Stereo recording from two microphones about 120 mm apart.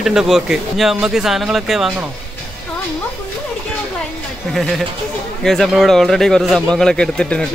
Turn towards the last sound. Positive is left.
turn(degrees=5)  # may be behind; listen again after turning